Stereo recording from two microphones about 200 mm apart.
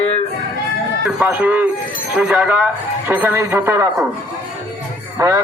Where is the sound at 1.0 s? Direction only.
10° right (ahead or behind).